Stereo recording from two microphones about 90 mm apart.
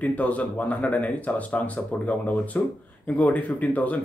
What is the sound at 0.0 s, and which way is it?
Speech, 15° left (ahead or behind).